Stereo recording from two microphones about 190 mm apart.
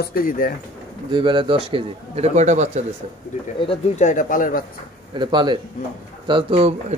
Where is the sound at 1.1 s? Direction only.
25° right (ahead or behind).